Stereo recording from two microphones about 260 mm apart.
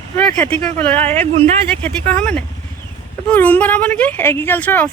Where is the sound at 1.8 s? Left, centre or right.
Centre.